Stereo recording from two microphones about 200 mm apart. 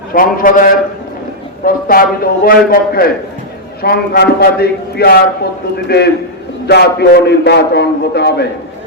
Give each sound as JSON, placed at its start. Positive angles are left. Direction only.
{"t": 0.1, "sound": "a man's voice", "side_deg": 45}